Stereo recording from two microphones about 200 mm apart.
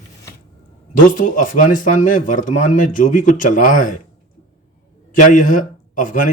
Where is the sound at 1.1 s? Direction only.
40° left (ahead or behind).